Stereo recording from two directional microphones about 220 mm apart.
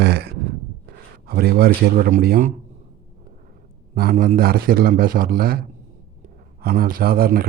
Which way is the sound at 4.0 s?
40° right (ahead or behind).